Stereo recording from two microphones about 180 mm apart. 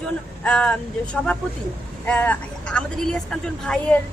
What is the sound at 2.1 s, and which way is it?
A woman's voice, 5° left (ahead or behind).